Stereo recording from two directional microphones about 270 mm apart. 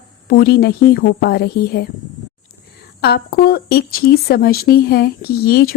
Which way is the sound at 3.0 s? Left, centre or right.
Left.